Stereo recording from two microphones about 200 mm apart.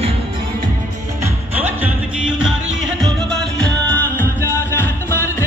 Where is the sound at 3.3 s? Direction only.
5° left (ahead or behind).